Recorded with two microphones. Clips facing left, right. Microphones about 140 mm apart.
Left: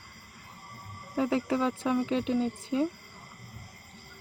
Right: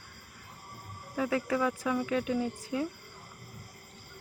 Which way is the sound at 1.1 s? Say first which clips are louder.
Left 2 dB; 25° left (ahead or behind).